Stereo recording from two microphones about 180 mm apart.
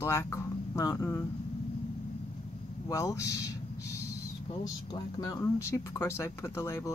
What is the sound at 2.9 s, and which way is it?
A woman's voice, 15° left (ahead or behind).